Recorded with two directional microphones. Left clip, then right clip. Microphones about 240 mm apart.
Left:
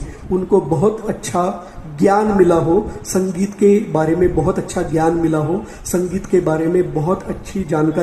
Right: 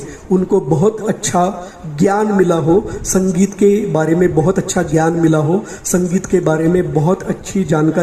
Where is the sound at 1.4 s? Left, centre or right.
Right.